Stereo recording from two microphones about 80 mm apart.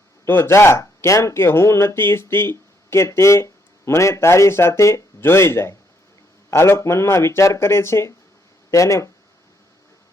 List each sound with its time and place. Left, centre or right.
0.3 s speech: left